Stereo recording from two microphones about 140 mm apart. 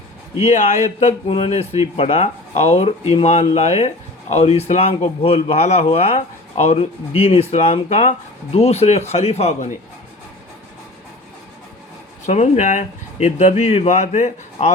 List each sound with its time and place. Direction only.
0.4 s speech: 55° left (ahead or behind)
12.2 s speech: 55° left (ahead or behind)